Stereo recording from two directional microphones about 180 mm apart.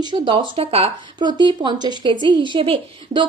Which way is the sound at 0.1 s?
30° right (ahead or behind).